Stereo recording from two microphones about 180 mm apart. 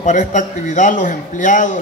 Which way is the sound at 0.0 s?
40° left (ahead or behind).